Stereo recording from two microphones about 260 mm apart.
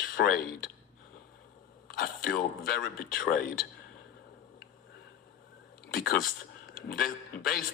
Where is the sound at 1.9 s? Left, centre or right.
Left.